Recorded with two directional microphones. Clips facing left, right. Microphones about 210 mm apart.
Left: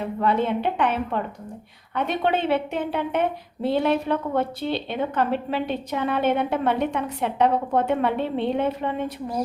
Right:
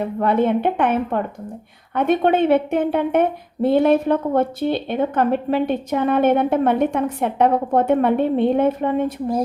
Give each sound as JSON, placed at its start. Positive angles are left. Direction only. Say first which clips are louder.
{"t": 0.2, "sound": "a woman's voice", "louder": "right 5 dB", "side_deg": -55}